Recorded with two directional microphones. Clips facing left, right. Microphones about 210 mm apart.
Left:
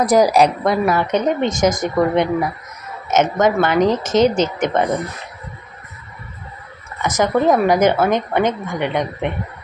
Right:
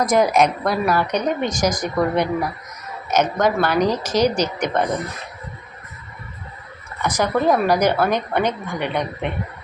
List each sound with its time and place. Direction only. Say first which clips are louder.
0.0 s a woman's voice: left 3 dB; 35° left (ahead or behind)
0.6 s speech: left 3 dB; 20° left (ahead or behind)
7.0 s speech: left 3 dB; 20° left (ahead or behind)